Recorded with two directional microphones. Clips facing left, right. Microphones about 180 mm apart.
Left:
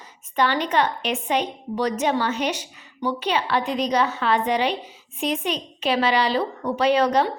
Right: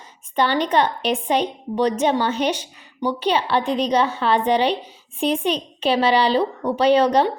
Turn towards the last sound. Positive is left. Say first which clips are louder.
# right 3 dB
turn(degrees=-30)  # may be behind; listen again after turning